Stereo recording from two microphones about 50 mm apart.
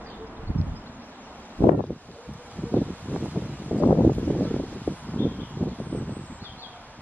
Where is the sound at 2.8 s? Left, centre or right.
Left.